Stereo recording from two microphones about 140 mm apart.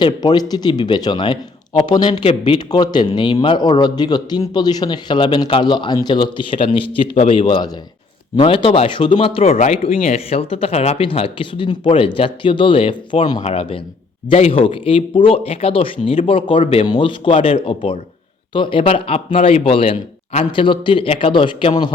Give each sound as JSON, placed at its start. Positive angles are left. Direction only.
{"t": 0.0, "sound": "speech", "side_deg": 30}
{"t": 13.4, "sound": "speech", "side_deg": 45}